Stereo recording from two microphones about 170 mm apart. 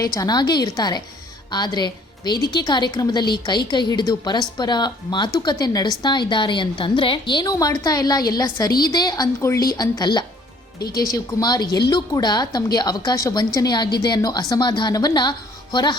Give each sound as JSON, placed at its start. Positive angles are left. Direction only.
{"t": 0.0, "sound": "a woman's voice", "side_deg": 20}